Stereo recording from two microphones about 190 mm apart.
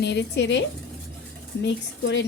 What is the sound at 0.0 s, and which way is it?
Speech, 65° left (ahead or behind).